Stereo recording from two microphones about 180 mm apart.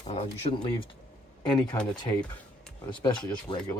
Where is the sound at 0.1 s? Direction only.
35° left (ahead or behind).